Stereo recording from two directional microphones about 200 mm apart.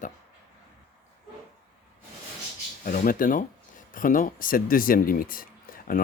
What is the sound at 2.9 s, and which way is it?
Speech, 45° left (ahead or behind).